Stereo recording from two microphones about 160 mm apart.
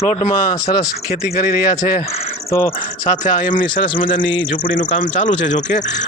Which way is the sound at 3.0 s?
50° left (ahead or behind).